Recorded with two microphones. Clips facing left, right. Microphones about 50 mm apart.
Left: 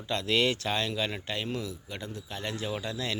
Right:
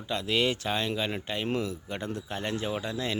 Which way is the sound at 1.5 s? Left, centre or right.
Right.